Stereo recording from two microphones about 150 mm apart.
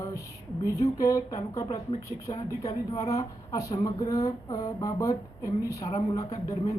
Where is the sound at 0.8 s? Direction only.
20° left (ahead or behind).